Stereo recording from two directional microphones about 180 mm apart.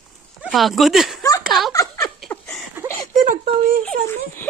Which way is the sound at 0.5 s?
Centre (ahead or behind).